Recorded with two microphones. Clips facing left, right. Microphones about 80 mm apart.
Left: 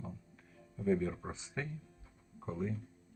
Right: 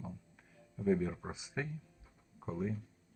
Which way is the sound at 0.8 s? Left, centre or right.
Centre.